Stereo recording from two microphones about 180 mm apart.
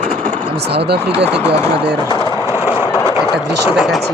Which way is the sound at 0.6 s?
65° right (ahead or behind).